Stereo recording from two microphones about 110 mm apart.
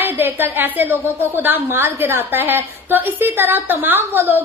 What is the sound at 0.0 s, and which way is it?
A woman's voice, 20° right (ahead or behind).